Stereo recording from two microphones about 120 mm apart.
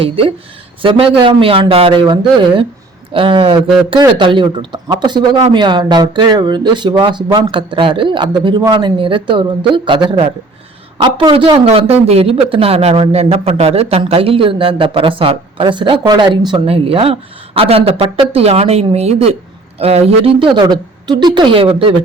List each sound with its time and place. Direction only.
0.0 s a man's voice: 50° right (ahead or behind)